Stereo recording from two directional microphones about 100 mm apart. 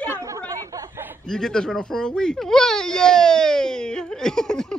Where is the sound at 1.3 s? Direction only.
5° left (ahead or behind).